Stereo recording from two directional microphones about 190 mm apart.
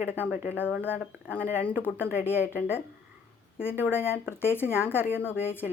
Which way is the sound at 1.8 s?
10° left (ahead or behind).